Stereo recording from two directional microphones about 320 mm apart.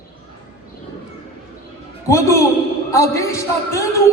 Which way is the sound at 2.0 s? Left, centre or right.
Centre.